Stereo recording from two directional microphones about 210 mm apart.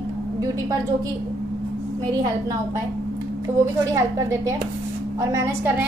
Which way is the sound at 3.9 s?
15° right (ahead or behind).